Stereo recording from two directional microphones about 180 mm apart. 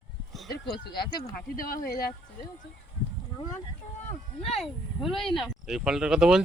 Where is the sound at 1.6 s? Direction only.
55° left (ahead or behind).